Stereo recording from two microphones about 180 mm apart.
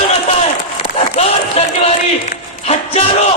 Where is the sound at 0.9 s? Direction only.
35° left (ahead or behind).